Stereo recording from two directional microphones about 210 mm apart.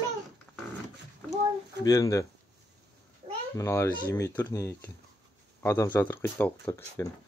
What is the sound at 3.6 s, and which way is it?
Speech, 10° left (ahead or behind).